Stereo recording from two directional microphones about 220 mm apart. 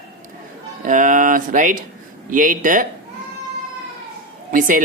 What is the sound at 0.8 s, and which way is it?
Speech, 35° right (ahead or behind).